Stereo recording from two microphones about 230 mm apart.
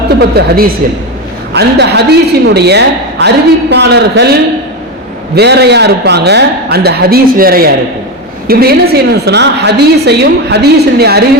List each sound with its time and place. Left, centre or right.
0.2 s a woman's voice: right